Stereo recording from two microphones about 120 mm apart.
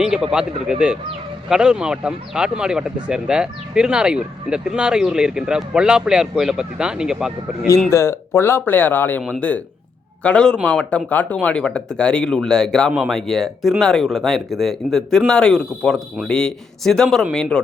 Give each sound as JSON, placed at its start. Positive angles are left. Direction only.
{"t": 0.0, "sound": "speech", "side_deg": -5}
{"t": 7.9, "sound": "speech", "side_deg": 20}